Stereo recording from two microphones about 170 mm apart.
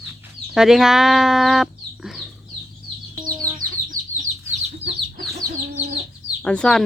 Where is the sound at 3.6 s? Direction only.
50° right (ahead or behind).